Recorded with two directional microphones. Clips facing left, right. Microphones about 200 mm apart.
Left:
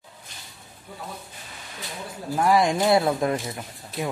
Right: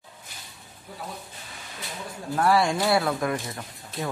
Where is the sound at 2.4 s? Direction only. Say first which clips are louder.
Left 2 dB; 15° left (ahead or behind).